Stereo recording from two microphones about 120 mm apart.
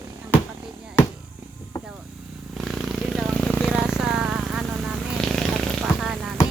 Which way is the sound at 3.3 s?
10° left (ahead or behind).